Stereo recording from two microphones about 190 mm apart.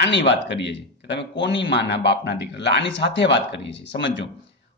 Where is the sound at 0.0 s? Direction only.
65° left (ahead or behind).